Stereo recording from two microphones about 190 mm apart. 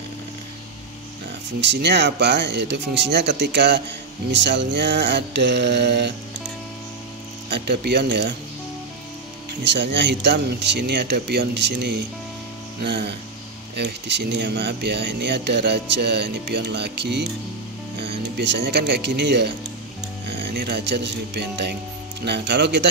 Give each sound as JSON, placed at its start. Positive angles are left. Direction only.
{"t": 1.6, "sound": "speech", "side_deg": -65}
{"t": 7.4, "sound": "speech", "side_deg": -60}
{"t": 9.6, "sound": "speech", "side_deg": -65}